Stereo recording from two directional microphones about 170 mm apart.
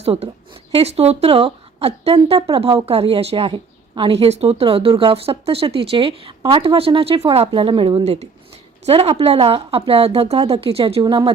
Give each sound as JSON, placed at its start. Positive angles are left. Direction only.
{"t": 0.0, "sound": "speech", "side_deg": -35}
{"t": 11.0, "sound": "speech", "side_deg": -25}